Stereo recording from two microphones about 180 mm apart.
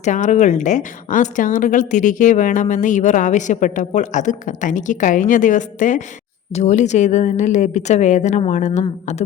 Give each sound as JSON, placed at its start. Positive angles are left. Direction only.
{"t": 0.0, "sound": "a woman's voice", "side_deg": 40}